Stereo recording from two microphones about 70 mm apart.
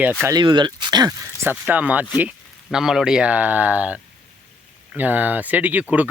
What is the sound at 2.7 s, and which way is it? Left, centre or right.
Speech, centre.